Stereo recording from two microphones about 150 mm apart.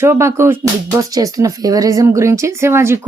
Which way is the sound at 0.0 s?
20° right (ahead or behind).